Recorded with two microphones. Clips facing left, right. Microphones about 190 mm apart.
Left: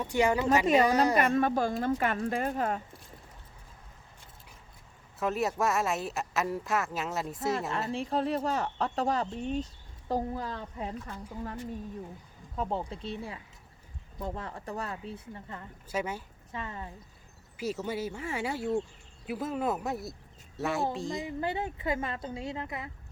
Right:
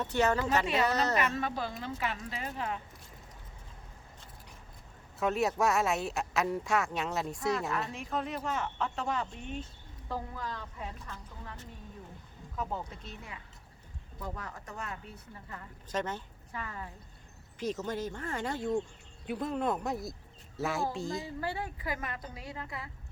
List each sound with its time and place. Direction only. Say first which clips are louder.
0.0 s speech: left 2 dB; 10° left (ahead or behind)
1.1 s speech: left 6 dB; 45° left (ahead or behind)
5.2 s speech: even; centre (ahead or behind)
7.9 s speech: left 6 dB; 35° left (ahead or behind)
12.5 s a woman's voice: left 4 dB; 30° left (ahead or behind)
15.9 s speech: left 1 dB; 10° left (ahead or behind)
16.5 s speech: left 2 dB; 25° left (ahead or behind)
17.6 s speech: left 1 dB; 10° left (ahead or behind)
21.2 s a woman's voice: left 4 dB; 20° left (ahead or behind)